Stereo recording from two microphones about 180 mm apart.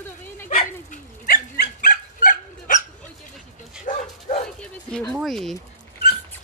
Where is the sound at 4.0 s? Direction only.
40° left (ahead or behind).